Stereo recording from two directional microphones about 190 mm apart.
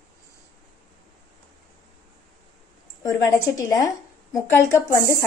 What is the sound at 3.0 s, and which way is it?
A woman's voice, 15° left (ahead or behind).